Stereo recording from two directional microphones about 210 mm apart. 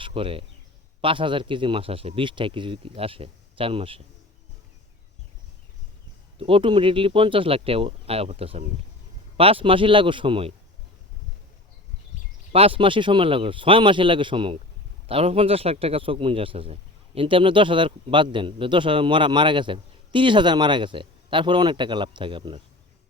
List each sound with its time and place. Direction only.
0.0 s speech: 25° right (ahead or behind)
6.4 s speech: 25° right (ahead or behind)
12.5 s speech: 25° right (ahead or behind)